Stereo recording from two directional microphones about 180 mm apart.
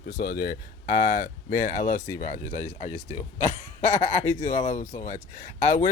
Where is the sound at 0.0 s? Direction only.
60° left (ahead or behind); by 3.2 s 40° left (ahead or behind).